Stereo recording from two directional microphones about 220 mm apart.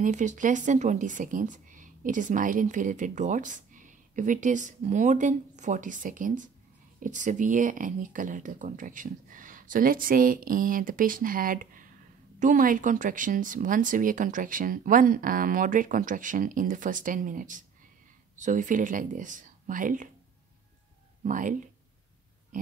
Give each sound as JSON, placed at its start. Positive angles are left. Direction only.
{"t": 0.0, "sound": "speech", "side_deg": -35}
{"t": 21.2, "sound": "speech", "side_deg": -35}
{"t": 22.5, "sound": "a sound", "side_deg": -35}